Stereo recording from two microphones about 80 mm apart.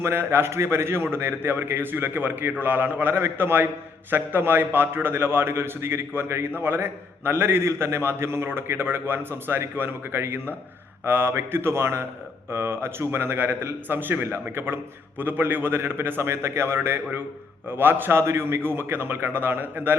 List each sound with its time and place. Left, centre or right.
0.0 s a man's voice: right